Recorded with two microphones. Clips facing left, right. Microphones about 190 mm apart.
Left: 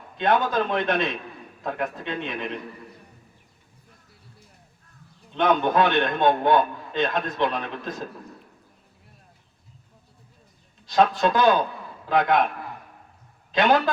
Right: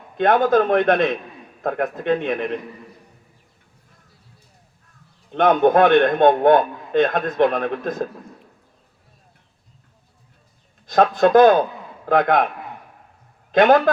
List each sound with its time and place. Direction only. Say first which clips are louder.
0.2 s a man's voice: right 6 dB; 55° right (ahead or behind)
5.3 s a man's voice: right 6 dB; 55° right (ahead or behind)
10.8 s a man's voice: right 4 dB; 55° right (ahead or behind)
13.5 s a man's voice: right 6 dB; 55° right (ahead or behind)